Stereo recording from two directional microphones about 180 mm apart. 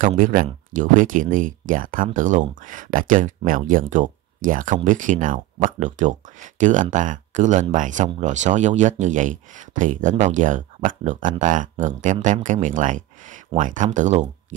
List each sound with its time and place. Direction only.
0.0 s speech: 45° right (ahead or behind)